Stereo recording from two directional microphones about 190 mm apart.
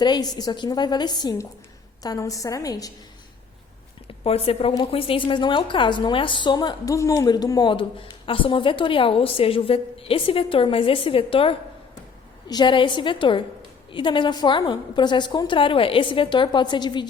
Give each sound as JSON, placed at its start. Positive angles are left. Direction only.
{"t": 0.0, "sound": "a woman's voice", "side_deg": 20}
{"t": 4.2, "sound": "a woman's voice", "side_deg": 30}